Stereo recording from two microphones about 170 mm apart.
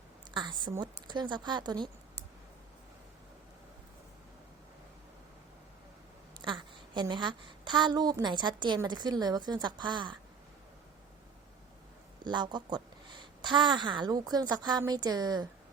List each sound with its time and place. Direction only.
0.3 s a woman's voice: 25° right (ahead or behind)
6.4 s a woman's voice: 25° right (ahead or behind)
12.2 s a woman's voice: 25° right (ahead or behind)